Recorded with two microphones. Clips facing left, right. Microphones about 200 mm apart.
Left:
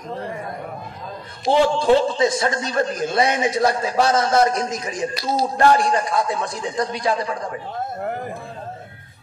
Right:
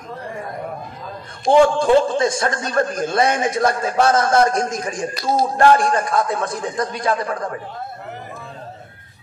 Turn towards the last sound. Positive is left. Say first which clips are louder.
# right 1 dB
turn(degrees=-50)  # may be behind; listen again after turning